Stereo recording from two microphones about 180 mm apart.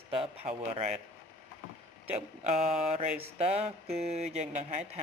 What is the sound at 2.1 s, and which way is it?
Speech, 40° right (ahead or behind).